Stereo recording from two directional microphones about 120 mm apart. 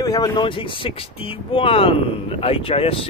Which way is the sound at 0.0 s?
30° left (ahead or behind).